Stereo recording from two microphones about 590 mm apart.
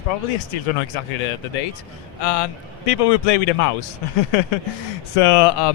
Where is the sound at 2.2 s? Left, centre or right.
Left.